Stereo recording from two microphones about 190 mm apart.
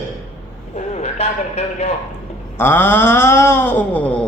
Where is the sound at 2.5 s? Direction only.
10° left (ahead or behind).